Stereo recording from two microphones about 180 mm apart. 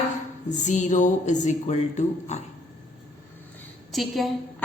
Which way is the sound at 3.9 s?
Centre (ahead or behind).